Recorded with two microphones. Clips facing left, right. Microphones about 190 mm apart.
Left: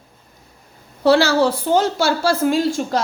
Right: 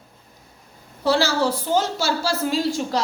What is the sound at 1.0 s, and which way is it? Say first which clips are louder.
A woman's voice: left 6 dB; 65° left (ahead or behind).